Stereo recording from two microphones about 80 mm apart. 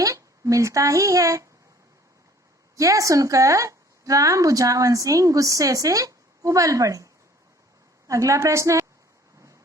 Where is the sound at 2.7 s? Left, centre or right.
Right.